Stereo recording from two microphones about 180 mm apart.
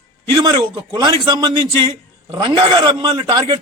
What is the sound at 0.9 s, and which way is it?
A man's voice, 20° right (ahead or behind).